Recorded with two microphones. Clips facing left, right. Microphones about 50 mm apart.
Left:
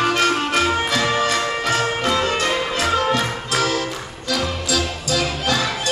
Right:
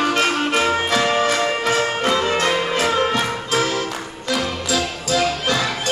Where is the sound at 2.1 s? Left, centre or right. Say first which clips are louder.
Right 1 dB; centre.